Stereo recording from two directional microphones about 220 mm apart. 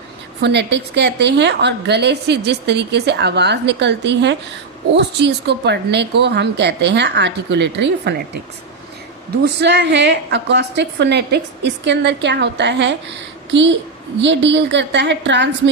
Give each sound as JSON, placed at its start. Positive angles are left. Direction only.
{"t": 0.4, "sound": "a woman's voice", "side_deg": -55}
{"t": 9.3, "sound": "a woman's voice", "side_deg": -50}